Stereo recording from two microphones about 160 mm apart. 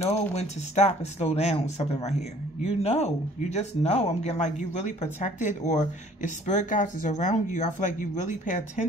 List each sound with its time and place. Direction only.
0.0 s speech: 40° left (ahead or behind)